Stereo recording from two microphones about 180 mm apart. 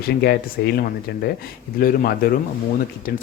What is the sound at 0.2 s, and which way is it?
Speech, 60° left (ahead or behind).